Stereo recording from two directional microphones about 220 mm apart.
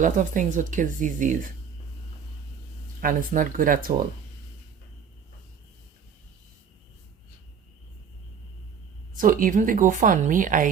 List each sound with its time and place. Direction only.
0.0 s a woman's voice: 35° right (ahead or behind)
3.0 s a woman's voice: 40° right (ahead or behind)
9.1 s a woman's voice: 40° right (ahead or behind)